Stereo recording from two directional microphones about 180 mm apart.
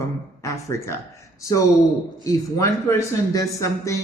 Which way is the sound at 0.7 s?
15° left (ahead or behind).